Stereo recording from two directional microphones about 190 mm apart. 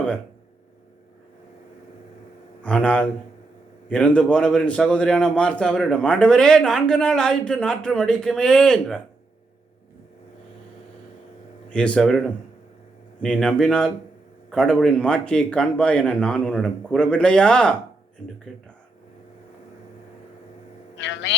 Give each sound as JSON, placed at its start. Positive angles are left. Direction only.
{"t": 2.6, "sound": "a man's voice", "side_deg": 5}
{"t": 11.7, "sound": "a man's voice", "side_deg": 5}
{"t": 21.0, "sound": "a man's voice", "side_deg": 70}